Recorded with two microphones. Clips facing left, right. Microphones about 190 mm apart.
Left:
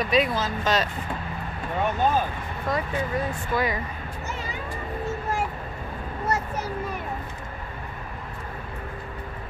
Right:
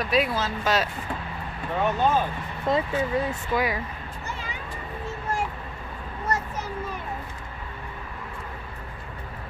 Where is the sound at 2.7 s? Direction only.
25° right (ahead or behind).